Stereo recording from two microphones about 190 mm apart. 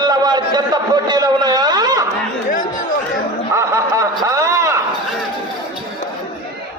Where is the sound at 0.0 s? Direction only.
20° right (ahead or behind).